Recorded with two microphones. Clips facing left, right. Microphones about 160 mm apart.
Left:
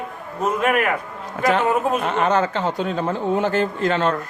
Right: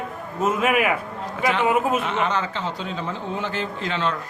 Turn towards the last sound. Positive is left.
turn(degrees=45)  # may be behind; listen again after turning